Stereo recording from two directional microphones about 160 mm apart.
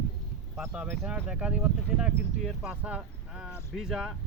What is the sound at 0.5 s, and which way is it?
Speech, 5° right (ahead or behind).